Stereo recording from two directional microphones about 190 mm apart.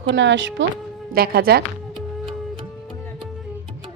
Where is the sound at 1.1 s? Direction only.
50° right (ahead or behind).